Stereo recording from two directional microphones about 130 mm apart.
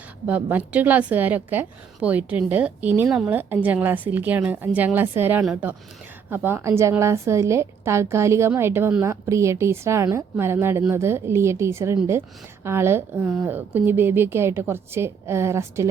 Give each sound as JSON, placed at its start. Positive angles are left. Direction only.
{"t": 0.3, "sound": "a woman's voice", "side_deg": -10}